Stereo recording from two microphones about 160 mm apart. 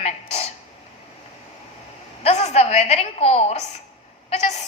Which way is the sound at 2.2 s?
45° left (ahead or behind).